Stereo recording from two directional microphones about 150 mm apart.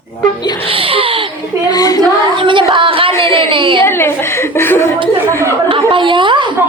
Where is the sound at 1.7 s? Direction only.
25° left (ahead or behind).